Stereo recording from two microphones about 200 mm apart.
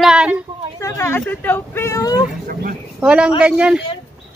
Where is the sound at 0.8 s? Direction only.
10° left (ahead or behind).